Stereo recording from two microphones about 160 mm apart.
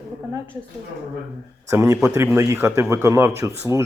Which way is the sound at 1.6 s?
20° right (ahead or behind).